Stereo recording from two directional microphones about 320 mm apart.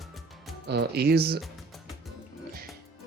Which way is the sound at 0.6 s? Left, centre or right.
Right.